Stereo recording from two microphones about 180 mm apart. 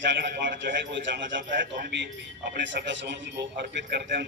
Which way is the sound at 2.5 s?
70° right (ahead or behind).